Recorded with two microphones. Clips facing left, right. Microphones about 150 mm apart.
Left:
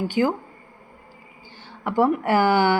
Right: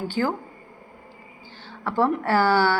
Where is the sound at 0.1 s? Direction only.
15° left (ahead or behind).